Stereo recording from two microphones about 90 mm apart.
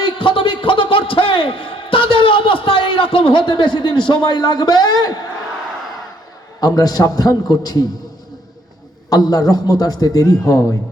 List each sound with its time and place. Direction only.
0.0 s a sound: 70° left (ahead or behind); by 5.2 s 50° left (ahead or behind)
6.6 s a man's voice: 45° left (ahead or behind)
9.0 s a man's voice: 45° left (ahead or behind)